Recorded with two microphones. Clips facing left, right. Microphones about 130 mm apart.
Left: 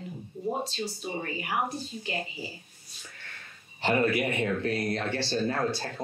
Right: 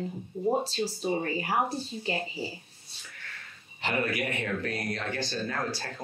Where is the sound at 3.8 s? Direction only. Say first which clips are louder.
Left 5 dB; 30° left (ahead or behind).